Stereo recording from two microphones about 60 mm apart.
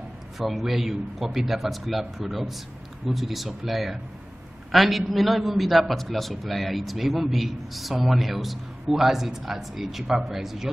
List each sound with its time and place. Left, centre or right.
0.4 s a man's voice: centre